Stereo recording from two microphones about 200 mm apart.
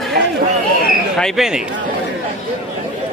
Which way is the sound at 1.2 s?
Centre (ahead or behind).